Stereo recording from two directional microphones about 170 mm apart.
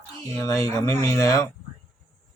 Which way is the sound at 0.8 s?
20° left (ahead or behind).